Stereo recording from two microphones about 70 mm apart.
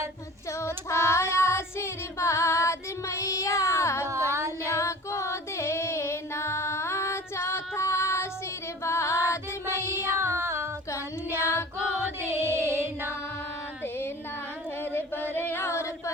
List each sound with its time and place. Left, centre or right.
0.6 s child singing: left
4.6 s female singing: left
8.8 s music: left
10.2 s child singing: right
10.9 s child singing: left
12.2 s music: right
14.9 s singing: left